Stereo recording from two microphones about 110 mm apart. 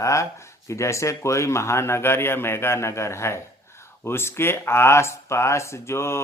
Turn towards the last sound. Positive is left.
turn(degrees=25)  # may be behind; listen again after turning